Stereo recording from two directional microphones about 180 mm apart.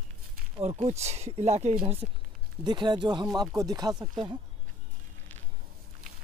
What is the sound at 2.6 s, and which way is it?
Speech, 25° right (ahead or behind).